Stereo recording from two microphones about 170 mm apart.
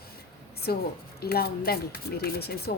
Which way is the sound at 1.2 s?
65° left (ahead or behind).